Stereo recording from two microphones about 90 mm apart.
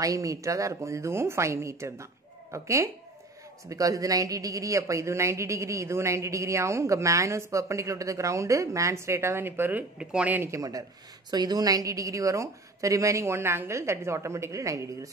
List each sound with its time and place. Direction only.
0.0 s speech: 40° right (ahead or behind); by 10.5 s 20° right (ahead or behind)
10.5 s speech: 40° right (ahead or behind)